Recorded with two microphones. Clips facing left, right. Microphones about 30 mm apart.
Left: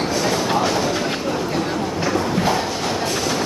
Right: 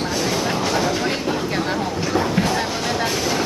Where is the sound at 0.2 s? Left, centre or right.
Centre.